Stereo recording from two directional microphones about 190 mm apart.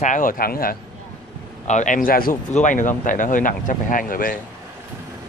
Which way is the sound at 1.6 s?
40° left (ahead or behind).